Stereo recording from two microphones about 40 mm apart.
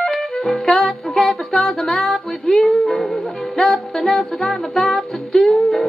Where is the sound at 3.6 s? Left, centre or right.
Centre.